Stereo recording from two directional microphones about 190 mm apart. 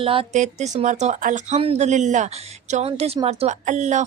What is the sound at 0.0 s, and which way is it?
Speech, 30° right (ahead or behind).